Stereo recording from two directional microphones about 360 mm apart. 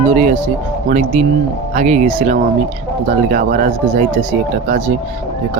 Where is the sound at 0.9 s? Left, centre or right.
Right.